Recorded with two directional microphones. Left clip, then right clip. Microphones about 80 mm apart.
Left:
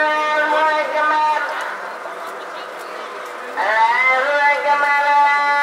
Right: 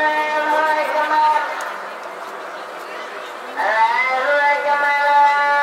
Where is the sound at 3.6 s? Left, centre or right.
Left.